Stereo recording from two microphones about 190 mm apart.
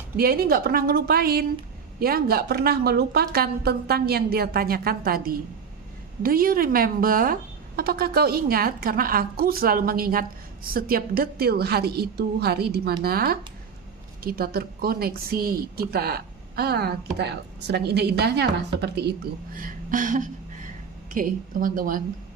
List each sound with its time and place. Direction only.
0.2 s a woman's voice: 55° right (ahead or behind)